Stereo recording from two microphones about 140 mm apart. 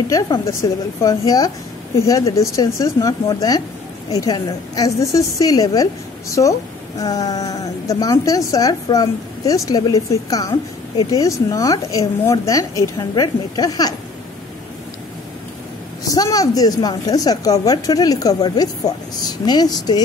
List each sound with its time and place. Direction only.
0.1 s a woman's voice: 25° left (ahead or behind)
16.1 s a woman's voice: 25° left (ahead or behind)